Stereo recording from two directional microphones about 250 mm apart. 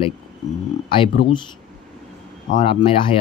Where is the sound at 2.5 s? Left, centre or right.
Left.